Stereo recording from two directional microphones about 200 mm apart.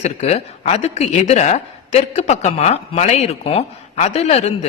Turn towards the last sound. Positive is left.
turn(degrees=30)  # may be behind; listen again after turning